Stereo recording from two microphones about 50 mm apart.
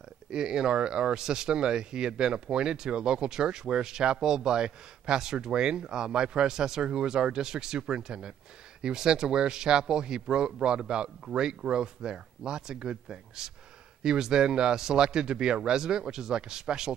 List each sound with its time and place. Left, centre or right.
0.3 s speech: centre